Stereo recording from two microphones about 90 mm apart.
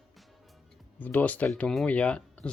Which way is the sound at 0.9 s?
20° left (ahead or behind).